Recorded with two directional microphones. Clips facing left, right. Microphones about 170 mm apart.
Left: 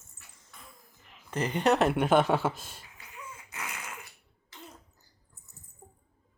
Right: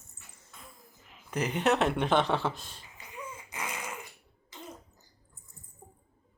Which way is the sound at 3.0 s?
10° right (ahead or behind).